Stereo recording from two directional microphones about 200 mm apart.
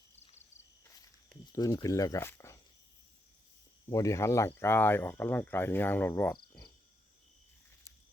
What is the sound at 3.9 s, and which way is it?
Speech, 15° left (ahead or behind).